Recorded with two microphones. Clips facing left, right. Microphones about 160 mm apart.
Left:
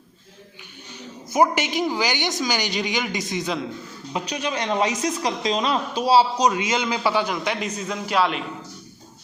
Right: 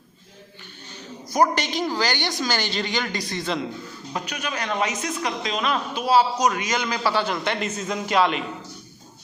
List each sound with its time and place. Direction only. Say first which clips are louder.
1.4 s a woman's voice: left 1 dB; 15° left (ahead or behind)